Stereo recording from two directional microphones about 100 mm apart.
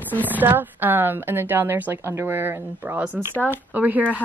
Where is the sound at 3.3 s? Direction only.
15° left (ahead or behind).